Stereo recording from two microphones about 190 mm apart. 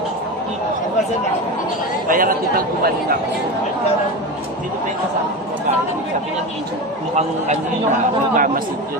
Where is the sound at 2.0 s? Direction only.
45° right (ahead or behind).